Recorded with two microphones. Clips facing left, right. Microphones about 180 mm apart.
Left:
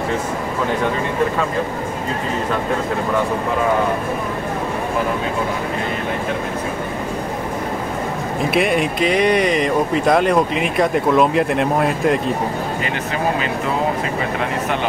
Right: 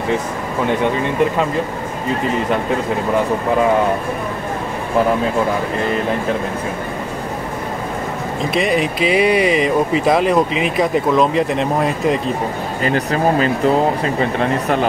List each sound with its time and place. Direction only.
8.5 s speech: centre (ahead or behind)
12.8 s speech: 40° right (ahead or behind)